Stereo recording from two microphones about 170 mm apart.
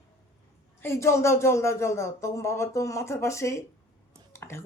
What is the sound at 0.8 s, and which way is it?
Speech, 15° left (ahead or behind).